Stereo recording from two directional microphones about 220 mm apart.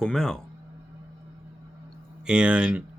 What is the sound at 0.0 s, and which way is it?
Speech, 5° left (ahead or behind).